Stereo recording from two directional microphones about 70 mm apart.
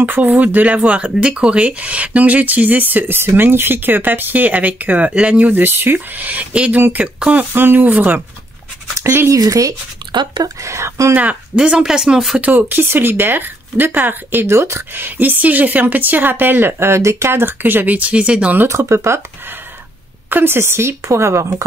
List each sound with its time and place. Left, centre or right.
0.0 s speech: right
9.3 s speech: right
10.1 s speech: right
10.6 s speech: right
11.1 s speech: centre
12.4 s speech: right
15.0 s speech: right
18.7 s a woman's voice: right
20.2 s a woman's voice: right